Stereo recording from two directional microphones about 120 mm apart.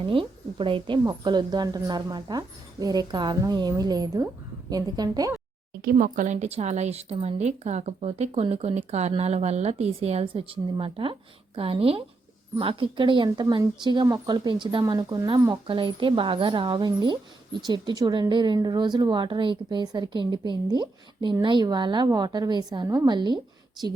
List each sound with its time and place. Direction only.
0.0 s speech: 45° right (ahead or behind)
6.0 s speech: 90° right; by 15.5 s 30° right (ahead or behind)
15.6 s speech: 45° right (ahead or behind)